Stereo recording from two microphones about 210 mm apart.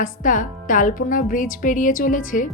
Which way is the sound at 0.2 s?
40° left (ahead or behind).